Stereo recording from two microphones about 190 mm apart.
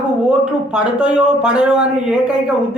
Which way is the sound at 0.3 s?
5° right (ahead or behind).